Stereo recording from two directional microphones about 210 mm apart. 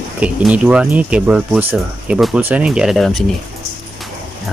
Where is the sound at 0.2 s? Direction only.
5° right (ahead or behind).